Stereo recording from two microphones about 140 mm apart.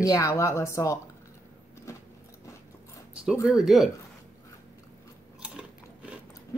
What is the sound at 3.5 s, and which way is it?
Speech, centre (ahead or behind).